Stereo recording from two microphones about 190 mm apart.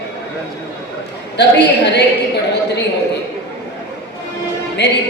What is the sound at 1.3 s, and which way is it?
Speech, 65° left (ahead or behind).